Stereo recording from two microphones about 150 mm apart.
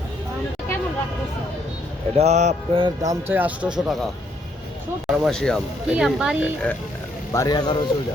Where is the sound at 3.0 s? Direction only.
20° right (ahead or behind).